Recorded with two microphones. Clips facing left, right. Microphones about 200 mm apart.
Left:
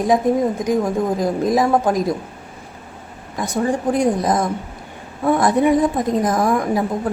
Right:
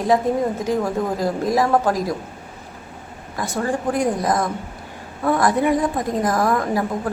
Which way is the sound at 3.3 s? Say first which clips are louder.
Left 3 dB; 20° left (ahead or behind).